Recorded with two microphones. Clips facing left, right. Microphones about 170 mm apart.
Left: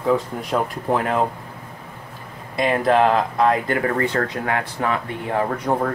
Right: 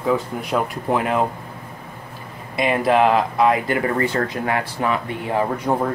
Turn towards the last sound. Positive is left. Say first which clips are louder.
# right 1 dB
turn(degrees=-10)  # may be behind; listen again after turning